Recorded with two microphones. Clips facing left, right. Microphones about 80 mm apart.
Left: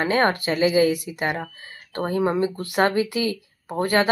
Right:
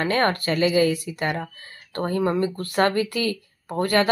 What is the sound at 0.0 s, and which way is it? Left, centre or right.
Speech, centre.